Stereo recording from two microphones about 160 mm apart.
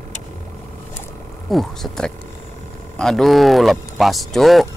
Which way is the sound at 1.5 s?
Centre (ahead or behind).